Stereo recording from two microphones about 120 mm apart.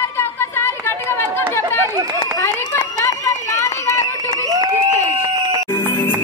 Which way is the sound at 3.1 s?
25° left (ahead or behind).